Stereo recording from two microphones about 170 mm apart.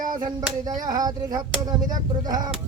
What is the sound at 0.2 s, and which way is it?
Speech, 25° right (ahead or behind).